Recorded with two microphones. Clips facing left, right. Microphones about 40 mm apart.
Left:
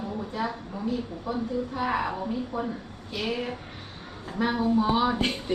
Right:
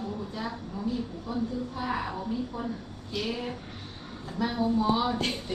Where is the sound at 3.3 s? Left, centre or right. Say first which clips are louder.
Left 3 dB; left.